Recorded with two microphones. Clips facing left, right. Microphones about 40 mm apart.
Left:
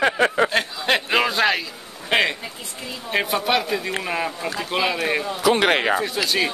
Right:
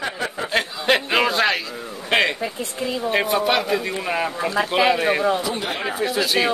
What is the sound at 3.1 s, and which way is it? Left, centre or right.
A man's voice, centre.